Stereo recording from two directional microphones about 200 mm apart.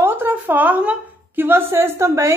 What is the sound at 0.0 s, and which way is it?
A woman's voice, 10° right (ahead or behind).